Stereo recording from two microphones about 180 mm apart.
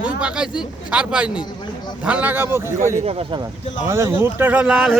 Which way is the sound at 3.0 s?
30° right (ahead or behind).